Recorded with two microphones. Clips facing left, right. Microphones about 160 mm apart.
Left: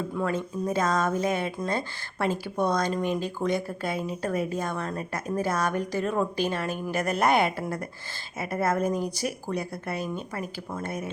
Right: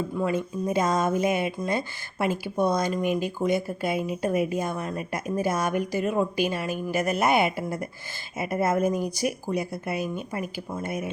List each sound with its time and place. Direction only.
0.2 s speech: 10° right (ahead or behind)